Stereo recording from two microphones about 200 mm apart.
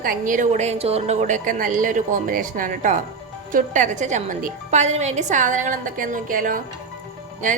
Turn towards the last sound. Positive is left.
turn(degrees=-40)  # may be behind; listen again after turning